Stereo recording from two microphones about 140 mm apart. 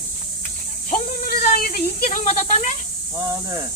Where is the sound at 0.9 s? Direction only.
90° left.